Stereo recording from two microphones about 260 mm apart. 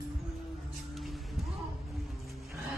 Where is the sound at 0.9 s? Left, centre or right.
Centre.